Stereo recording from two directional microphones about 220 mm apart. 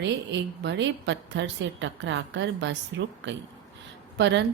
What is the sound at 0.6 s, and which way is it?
A woman's voice, 55° right (ahead or behind).